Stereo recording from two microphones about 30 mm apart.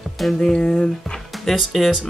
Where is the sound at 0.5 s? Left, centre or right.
Left.